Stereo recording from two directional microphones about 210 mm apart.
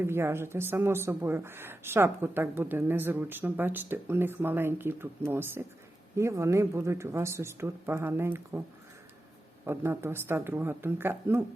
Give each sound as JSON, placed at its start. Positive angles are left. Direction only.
{"t": 0.0, "sound": "speech", "side_deg": -10}
{"t": 9.6, "sound": "speech", "side_deg": -10}